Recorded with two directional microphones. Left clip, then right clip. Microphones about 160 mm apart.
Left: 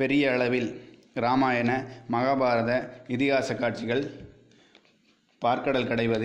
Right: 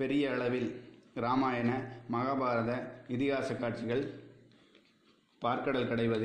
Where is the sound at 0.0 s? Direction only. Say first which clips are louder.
Left 8 dB; 40° left (ahead or behind).